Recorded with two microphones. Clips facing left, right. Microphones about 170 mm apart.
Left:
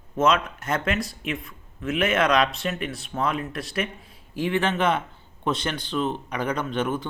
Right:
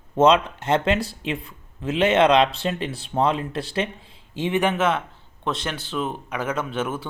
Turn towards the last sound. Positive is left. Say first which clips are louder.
# even
turn(degrees=-5)  # may be behind; listen again after turning